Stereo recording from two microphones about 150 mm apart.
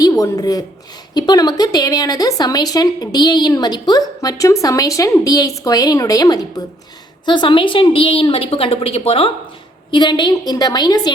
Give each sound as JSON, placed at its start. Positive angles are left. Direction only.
{"t": 0.0, "sound": "a woman's voice", "side_deg": 25}